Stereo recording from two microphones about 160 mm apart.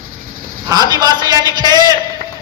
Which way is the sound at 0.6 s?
25° right (ahead or behind).